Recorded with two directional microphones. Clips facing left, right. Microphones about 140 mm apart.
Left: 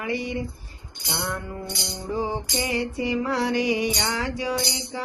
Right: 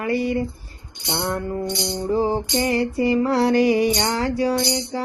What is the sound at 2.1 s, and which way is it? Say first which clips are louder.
Music: right 6 dB; 40° right (ahead or behind).